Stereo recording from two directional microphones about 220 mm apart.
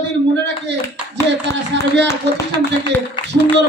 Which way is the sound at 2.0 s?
20° left (ahead or behind).